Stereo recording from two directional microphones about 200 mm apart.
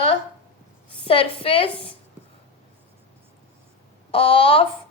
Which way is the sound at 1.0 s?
25° left (ahead or behind).